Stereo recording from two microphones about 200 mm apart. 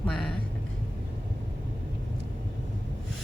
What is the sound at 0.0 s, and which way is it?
Vehicle, 5° left (ahead or behind).